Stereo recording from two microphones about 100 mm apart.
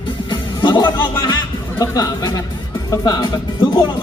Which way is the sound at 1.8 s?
35° left (ahead or behind).